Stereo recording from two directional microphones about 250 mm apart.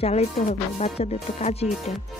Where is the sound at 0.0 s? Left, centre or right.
Left.